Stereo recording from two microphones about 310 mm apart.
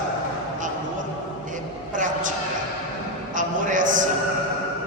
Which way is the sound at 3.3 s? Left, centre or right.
Right.